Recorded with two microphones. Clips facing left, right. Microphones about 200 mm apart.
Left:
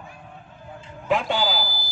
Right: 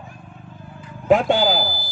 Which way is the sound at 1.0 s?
45° right (ahead or behind).